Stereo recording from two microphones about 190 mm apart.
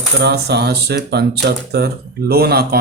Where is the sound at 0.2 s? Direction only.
60° right (ahead or behind).